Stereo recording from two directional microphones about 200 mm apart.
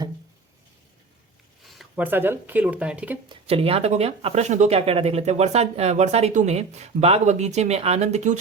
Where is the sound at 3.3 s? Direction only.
30° right (ahead or behind).